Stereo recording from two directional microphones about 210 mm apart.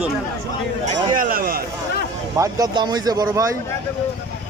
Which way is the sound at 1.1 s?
40° right (ahead or behind).